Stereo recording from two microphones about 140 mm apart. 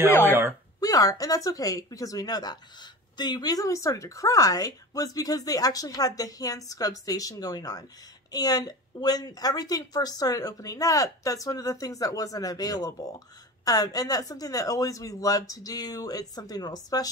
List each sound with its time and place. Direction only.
0.1 s speech: 15° left (ahead or behind)